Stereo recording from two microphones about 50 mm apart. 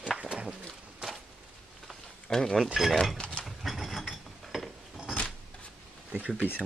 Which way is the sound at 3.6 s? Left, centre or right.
Centre.